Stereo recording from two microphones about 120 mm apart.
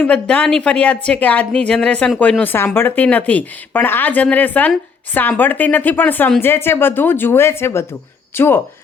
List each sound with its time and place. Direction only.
0.0 s a woman's voice: 10° left (ahead or behind)